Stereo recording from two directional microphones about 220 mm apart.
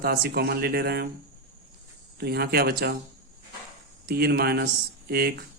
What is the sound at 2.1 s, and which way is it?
Speech, 45° right (ahead or behind).